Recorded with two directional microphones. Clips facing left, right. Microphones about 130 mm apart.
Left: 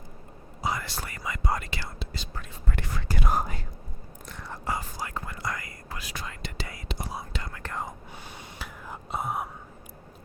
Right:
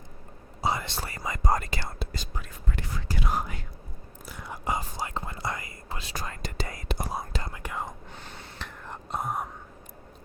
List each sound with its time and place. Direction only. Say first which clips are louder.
0.6 s speech: right 2 dB; 25° right (ahead or behind); by 2.2 s 45° right (ahead or behind)
2.6 s whispering: left 2 dB; 60° left (ahead or behind); by 3.6 s 40° left (ahead or behind)
4.3 s whispering: right 1 dB; 10° right (ahead or behind); by 6.1 s 25° right (ahead or behind)
6.1 s whispering: right 4 dB; 40° right (ahead or behind)
7.5 s whispering: even; 10° right (ahead or behind)
7.8 s whispering: even; 5° left (ahead or behind)